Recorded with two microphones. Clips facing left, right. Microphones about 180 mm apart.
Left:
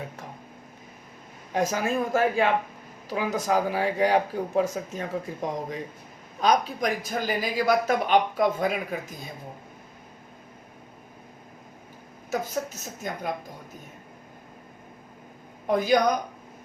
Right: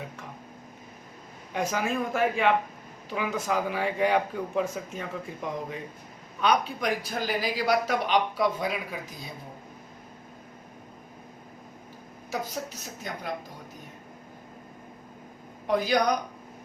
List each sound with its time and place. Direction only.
1.5 s a man's voice: 40° left (ahead or behind)
13.0 s speech: 50° left (ahead or behind)
15.6 s speech: 50° left (ahead or behind)